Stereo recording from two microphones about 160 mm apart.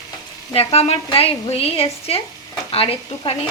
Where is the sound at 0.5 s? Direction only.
40° left (ahead or behind).